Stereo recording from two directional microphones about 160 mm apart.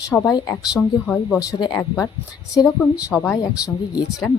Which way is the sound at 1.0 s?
5° left (ahead or behind).